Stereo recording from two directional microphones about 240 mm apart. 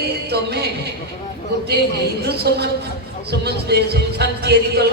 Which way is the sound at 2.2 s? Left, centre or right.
Right.